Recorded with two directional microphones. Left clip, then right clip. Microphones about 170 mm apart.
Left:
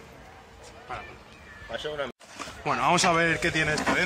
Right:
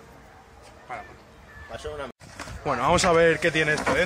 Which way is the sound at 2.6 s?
55° right (ahead or behind).